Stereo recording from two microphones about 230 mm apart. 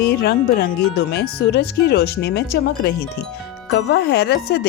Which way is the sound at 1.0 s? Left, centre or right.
Left.